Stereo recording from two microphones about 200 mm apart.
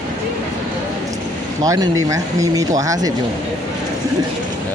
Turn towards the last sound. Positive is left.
turn(degrees=-15)  # may be behind; listen again after turning